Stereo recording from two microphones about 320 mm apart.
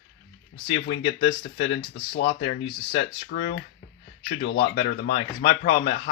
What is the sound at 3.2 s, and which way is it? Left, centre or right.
Speech, left.